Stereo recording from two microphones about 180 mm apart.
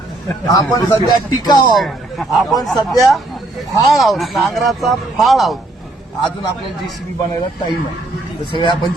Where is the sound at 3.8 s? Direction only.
Centre (ahead or behind).